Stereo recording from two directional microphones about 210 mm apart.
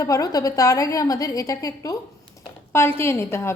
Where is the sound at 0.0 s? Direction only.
15° left (ahead or behind).